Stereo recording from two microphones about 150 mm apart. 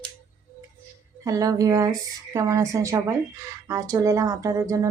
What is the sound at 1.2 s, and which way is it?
Speech, 20° right (ahead or behind).